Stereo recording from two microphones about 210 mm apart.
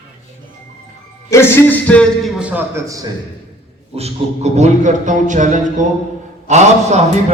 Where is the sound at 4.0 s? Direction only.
30° right (ahead or behind).